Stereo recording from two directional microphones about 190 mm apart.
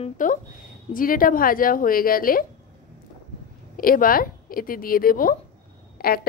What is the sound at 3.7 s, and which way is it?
Speech, 50° left (ahead or behind).